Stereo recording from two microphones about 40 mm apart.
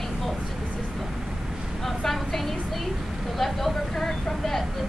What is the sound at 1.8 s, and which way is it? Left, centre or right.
A woman's voice, centre.